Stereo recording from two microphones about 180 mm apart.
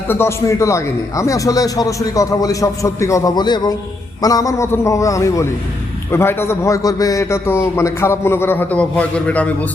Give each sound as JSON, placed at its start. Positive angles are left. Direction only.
{"t": 0.1, "sound": "a man's voice", "side_deg": 15}